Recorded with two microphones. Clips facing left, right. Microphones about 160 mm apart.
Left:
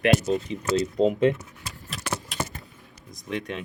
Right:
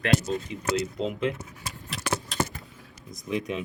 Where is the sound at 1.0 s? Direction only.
45° left (ahead or behind).